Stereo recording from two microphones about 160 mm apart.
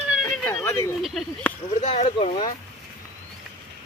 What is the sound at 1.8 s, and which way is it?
Speech, 45° left (ahead or behind).